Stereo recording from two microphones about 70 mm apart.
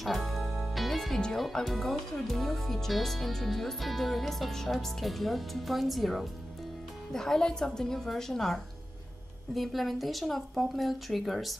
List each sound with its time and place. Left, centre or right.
0.0 s a woman's voice: centre